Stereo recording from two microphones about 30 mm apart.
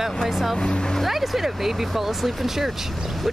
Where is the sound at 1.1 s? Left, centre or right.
Centre.